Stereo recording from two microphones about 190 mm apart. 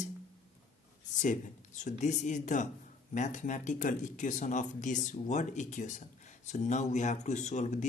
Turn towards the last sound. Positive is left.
turn(degrees=40)  # may be behind; listen again after turning